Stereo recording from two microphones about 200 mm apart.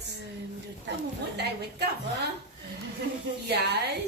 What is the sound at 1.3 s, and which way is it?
Speech, 55° right (ahead or behind).